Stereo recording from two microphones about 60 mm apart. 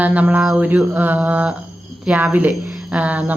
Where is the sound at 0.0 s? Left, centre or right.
Right.